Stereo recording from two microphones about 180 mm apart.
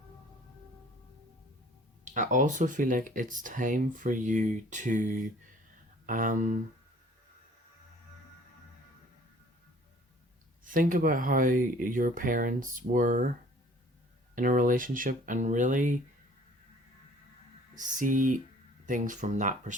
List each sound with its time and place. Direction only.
2.1 s speech: 45° right (ahead or behind)
6.1 s speech: 50° right (ahead or behind)
10.6 s speech: 50° right (ahead or behind)
14.3 s speech: 50° right (ahead or behind)
17.7 s speech: 45° right (ahead or behind)